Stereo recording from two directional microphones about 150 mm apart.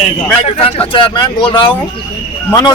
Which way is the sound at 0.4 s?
40° left (ahead or behind).